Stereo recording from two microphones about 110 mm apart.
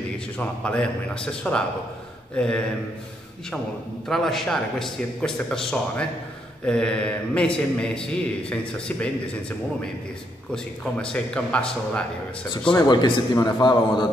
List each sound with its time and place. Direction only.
0.4 s a man's voice: 10° left (ahead or behind)
4.1 s a man's voice: 5° left (ahead or behind)
10.5 s a man's voice: 5° left (ahead or behind)
12.7 s a man's voice: 40° left (ahead or behind)